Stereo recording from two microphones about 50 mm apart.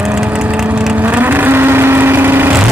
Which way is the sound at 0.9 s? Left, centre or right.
Right.